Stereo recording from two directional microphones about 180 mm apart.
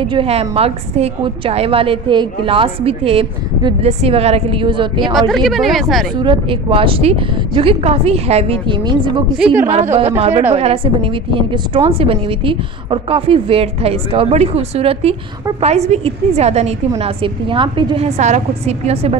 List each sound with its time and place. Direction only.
0.0 s a woman's voice: 30° right (ahead or behind)
5.3 s speech: centre (ahead or behind)
6.2 s a woman's voice: 30° right (ahead or behind)